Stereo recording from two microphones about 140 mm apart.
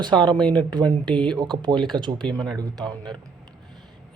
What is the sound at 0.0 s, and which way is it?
Speech, 35° right (ahead or behind).